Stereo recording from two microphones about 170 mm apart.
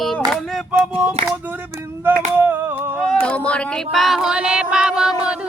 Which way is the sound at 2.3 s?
10° right (ahead or behind).